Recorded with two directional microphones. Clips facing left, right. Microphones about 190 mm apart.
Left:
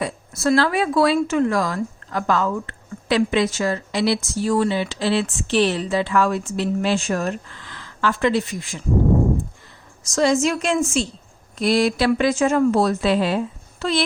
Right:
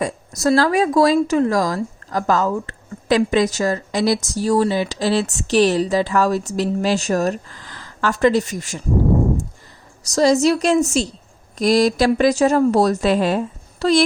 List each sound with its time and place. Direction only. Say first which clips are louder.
0.0 s speech: right 3 dB; 40° right (ahead or behind)
10.1 s speech: right 4 dB; 40° right (ahead or behind)